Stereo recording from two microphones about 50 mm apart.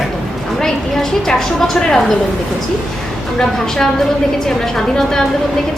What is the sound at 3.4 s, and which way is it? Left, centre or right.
A woman's voice, centre.